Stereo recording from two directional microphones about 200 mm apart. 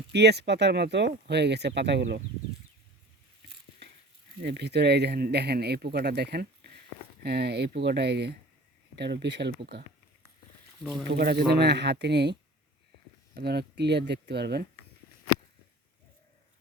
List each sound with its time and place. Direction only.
0.1 s speech: 55° right (ahead or behind)
4.4 s speech: 55° right (ahead or behind)
11.1 s speech: 50° right (ahead or behind)